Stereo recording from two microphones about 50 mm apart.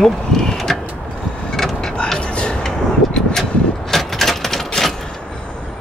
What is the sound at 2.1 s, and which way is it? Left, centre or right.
Vehicle, centre.